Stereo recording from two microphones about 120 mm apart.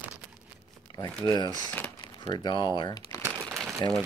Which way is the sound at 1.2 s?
35° left (ahead or behind).